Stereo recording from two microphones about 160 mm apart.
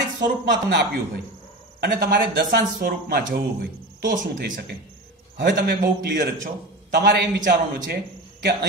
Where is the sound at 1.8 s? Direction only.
60° right (ahead or behind).